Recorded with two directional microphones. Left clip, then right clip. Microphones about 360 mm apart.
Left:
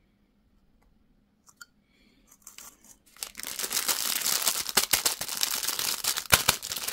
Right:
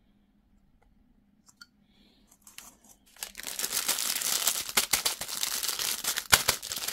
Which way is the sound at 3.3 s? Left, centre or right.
Centre.